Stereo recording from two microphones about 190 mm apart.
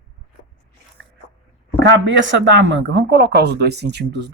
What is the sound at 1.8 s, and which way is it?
Speech, 75° right (ahead or behind).